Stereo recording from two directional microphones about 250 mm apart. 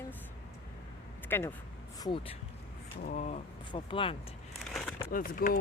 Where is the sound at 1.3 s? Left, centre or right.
Centre.